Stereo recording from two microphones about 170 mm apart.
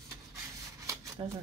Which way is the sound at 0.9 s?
20° right (ahead or behind).